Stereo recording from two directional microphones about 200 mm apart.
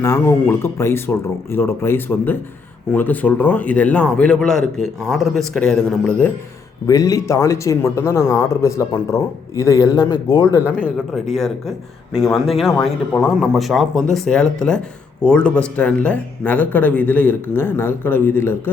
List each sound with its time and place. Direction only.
0.0 s a man's voice: 15° left (ahead or behind)
6.8 s speech: 15° left (ahead or behind)
10.8 s a man's voice: 5° left (ahead or behind)